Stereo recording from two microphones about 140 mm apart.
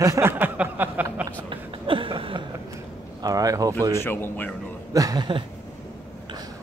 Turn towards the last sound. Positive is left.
turn(degrees=-30)  # may be behind; listen again after turning